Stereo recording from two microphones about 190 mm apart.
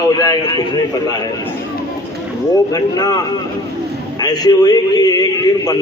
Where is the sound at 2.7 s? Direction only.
20° left (ahead or behind).